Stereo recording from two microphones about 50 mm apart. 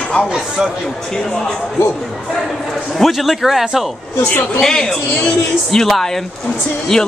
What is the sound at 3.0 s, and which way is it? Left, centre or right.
Speech, centre.